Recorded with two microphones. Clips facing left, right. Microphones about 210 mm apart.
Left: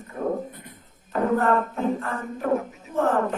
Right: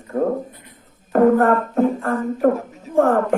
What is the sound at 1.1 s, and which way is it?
Music, 50° right (ahead or behind).